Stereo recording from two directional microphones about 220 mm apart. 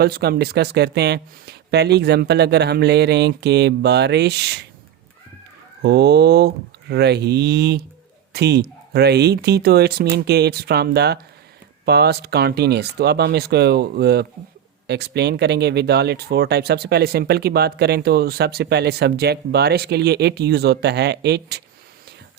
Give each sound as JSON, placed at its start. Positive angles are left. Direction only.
{"t": 0.0, "sound": "speech", "side_deg": -45}
{"t": 5.8, "sound": "speech", "side_deg": -50}